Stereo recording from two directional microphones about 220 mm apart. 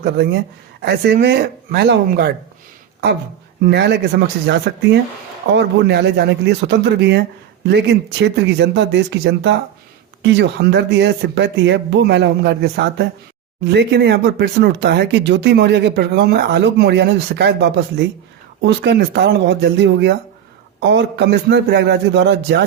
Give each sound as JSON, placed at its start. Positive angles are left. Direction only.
{"t": 0.0, "sound": "speech", "side_deg": -50}
{"t": 3.6, "sound": "speech", "side_deg": -50}